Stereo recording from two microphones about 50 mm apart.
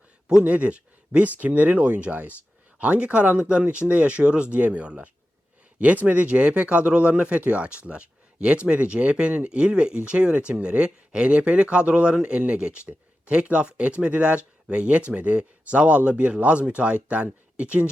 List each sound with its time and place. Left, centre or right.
0.3 s speech: right
5.8 s speech: right